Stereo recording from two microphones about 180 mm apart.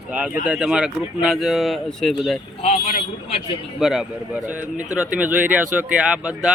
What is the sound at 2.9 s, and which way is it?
Speech, 45° left (ahead or behind).